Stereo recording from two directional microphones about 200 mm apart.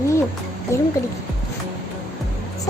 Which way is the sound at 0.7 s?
15° left (ahead or behind).